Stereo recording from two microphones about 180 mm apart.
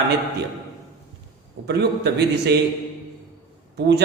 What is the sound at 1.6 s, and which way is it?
Speech, 70° right (ahead or behind).